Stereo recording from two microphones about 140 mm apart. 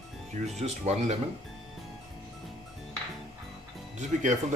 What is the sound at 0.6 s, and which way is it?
Speech, 55° right (ahead or behind).